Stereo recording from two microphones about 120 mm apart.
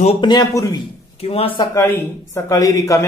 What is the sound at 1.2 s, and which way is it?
Speech, 55° left (ahead or behind).